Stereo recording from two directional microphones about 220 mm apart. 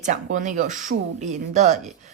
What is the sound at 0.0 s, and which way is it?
A woman's voice, 35° right (ahead or behind).